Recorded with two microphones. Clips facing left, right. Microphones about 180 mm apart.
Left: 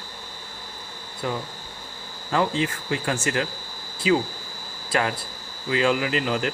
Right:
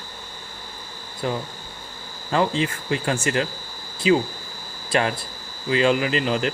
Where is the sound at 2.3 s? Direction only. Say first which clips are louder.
Right 2 dB; 25° right (ahead or behind).